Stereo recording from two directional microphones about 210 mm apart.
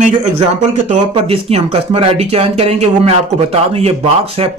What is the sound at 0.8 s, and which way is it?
A man's voice, 30° right (ahead or behind).